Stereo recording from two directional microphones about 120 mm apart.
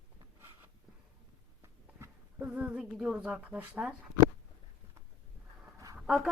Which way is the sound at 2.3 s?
15° right (ahead or behind).